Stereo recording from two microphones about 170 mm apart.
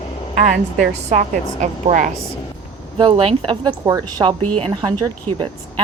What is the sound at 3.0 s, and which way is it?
A woman's voice, 35° right (ahead or behind).